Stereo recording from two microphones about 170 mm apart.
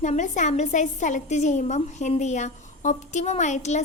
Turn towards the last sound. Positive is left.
turn(degrees=45)  # may be behind; listen again after turning